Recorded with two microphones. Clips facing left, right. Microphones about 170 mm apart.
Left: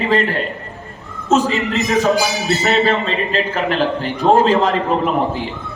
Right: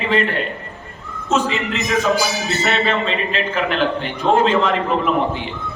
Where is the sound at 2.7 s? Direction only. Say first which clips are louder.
Left 3 dB; 40° left (ahead or behind).